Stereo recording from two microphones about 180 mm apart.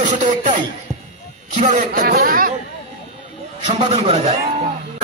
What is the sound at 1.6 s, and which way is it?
Speech, 45° right (ahead or behind).